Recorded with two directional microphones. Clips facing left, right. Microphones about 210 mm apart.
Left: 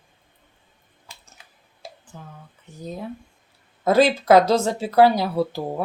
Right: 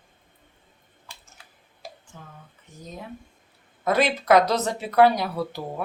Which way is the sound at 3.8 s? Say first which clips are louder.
Left 5 dB; 30° left (ahead or behind).